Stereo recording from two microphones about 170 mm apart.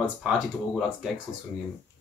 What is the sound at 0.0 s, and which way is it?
Speech, 5° right (ahead or behind).